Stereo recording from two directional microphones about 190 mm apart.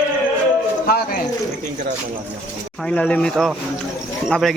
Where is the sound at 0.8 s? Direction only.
50° left (ahead or behind).